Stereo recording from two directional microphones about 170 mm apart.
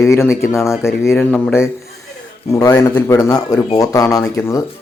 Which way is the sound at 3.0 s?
20° left (ahead or behind).